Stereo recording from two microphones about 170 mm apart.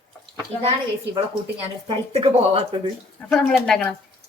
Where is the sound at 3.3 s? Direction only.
Centre (ahead or behind).